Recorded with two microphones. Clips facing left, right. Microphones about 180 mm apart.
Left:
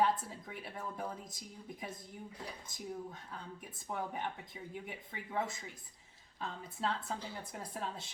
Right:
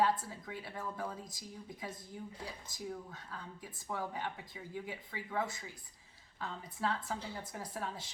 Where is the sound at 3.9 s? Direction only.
20° left (ahead or behind).